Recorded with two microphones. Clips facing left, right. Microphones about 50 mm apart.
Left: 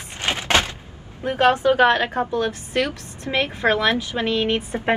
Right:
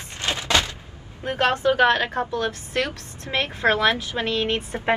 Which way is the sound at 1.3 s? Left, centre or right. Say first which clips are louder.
Left 3 dB; left.